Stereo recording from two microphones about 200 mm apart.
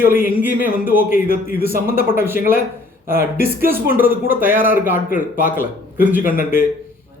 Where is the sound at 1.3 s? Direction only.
50° right (ahead or behind).